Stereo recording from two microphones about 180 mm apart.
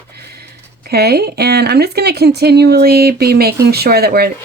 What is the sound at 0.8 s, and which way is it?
Speech, 60° right (ahead or behind).